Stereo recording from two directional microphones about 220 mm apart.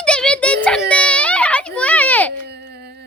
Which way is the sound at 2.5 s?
50° right (ahead or behind).